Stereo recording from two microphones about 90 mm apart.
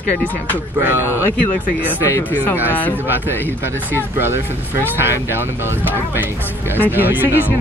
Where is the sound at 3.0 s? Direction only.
20° right (ahead or behind).